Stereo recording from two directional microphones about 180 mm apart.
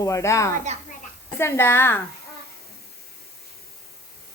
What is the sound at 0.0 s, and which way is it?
A woman's voice, 15° left (ahead or behind).